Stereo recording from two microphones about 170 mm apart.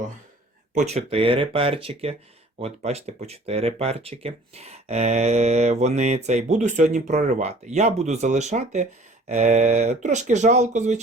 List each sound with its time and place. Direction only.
0.7 s speech: 45° right (ahead or behind)